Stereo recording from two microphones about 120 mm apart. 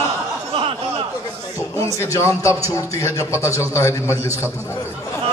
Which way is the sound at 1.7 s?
25° left (ahead or behind).